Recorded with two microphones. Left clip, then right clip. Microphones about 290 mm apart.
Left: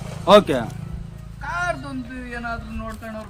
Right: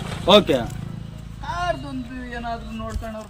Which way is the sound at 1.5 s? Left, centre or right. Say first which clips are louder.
Left 1 dB; centre.